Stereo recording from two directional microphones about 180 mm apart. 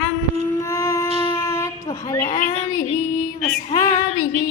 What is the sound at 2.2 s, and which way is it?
Female singing, 50° left (ahead or behind).